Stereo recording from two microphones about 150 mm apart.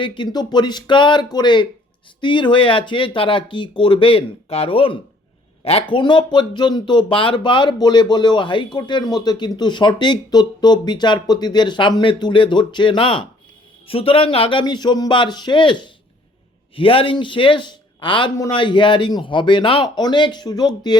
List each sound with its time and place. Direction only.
0.0 s speech: 30° left (ahead or behind)